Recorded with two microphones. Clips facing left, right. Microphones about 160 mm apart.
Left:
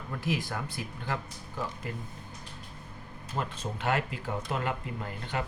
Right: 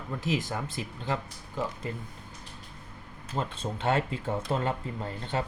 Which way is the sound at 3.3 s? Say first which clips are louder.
Right 2 dB; 25° right (ahead or behind).